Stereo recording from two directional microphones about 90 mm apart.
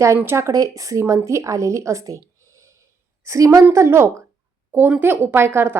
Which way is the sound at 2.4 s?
35° right (ahead or behind).